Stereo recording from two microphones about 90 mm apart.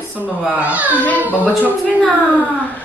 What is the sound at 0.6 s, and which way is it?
Speech, 15° right (ahead or behind).